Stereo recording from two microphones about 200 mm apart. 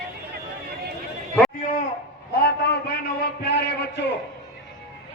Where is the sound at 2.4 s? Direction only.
55° left (ahead or behind).